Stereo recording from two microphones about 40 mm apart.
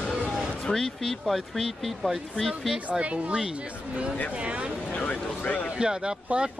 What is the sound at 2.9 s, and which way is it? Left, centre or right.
Speech, right.